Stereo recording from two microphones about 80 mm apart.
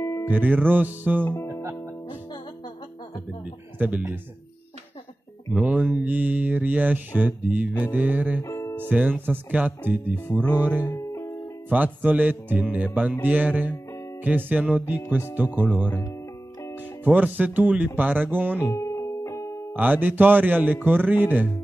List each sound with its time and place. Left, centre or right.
0.0 s music: left
0.3 s mantra: right
3.7 s speech: right
5.5 s mantra: centre
8.4 s music: left
8.7 s mantra: centre
11.1 s music: left
11.7 s mantra: right
17.0 s mantra: right
18.7 s music: left
19.7 s mantra: right